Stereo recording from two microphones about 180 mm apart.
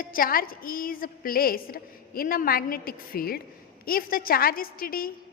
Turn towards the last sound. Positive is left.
turn(degrees=55)  # may be behind; listen again after turning